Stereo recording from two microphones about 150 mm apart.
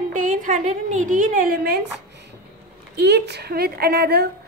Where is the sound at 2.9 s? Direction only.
90° right.